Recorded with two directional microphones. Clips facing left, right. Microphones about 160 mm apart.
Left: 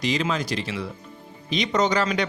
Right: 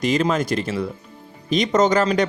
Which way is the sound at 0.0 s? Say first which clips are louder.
Right 5 dB; 45° right (ahead or behind).